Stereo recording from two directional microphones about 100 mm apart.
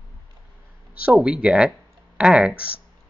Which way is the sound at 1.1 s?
10° right (ahead or behind).